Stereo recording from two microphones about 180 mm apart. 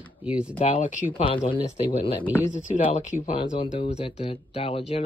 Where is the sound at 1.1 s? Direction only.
30° left (ahead or behind).